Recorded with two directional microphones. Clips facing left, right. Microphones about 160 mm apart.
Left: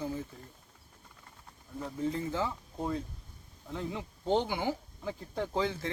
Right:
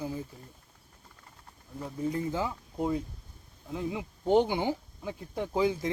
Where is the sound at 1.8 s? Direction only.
15° right (ahead or behind).